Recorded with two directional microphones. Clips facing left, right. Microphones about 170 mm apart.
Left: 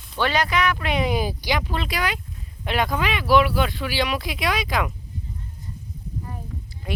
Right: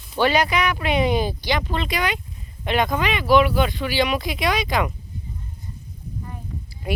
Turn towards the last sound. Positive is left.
turn(degrees=-10)  # may be behind; listen again after turning